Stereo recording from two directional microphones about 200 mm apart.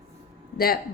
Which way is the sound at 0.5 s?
50° left (ahead or behind).